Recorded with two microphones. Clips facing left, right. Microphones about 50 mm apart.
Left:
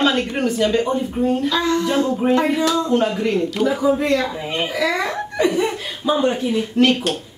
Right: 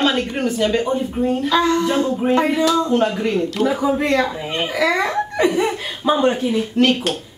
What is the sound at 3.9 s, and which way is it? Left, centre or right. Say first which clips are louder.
A woman's voice: right 1 dB; right.